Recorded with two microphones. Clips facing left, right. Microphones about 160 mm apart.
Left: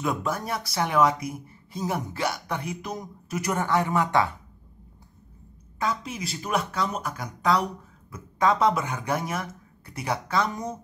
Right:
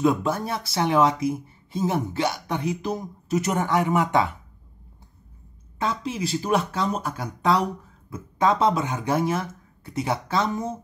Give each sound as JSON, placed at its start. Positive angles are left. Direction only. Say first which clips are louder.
{"t": 0.0, "sound": "speech", "louder": "right 6 dB", "side_deg": -25}
{"t": 5.8, "sound": "speech", "louder": "right 3 dB", "side_deg": -30}